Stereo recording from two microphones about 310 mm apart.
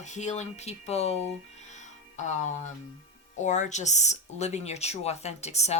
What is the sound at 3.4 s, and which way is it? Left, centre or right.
Speech, left.